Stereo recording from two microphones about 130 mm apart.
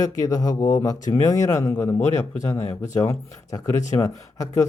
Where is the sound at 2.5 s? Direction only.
55° left (ahead or behind).